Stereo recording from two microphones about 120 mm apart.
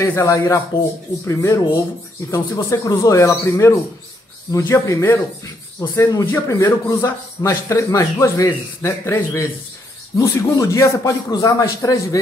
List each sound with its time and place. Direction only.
0.0 s speech: 20° left (ahead or behind)